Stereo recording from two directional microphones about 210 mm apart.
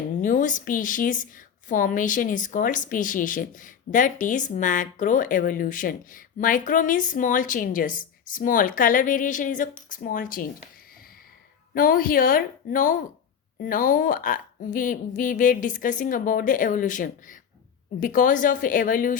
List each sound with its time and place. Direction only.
0.2 s a woman's voice: 40° left (ahead or behind)
11.7 s a woman's voice: 40° left (ahead or behind)